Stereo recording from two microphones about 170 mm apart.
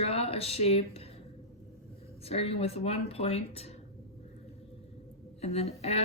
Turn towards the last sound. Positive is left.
turn(degrees=40)  # may be behind; listen again after turning